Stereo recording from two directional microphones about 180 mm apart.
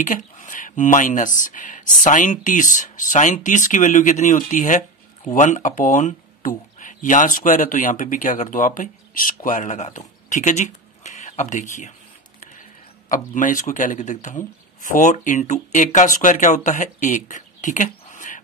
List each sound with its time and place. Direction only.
0.0 s speech: 45° left (ahead or behind)
13.1 s speech: 45° left (ahead or behind)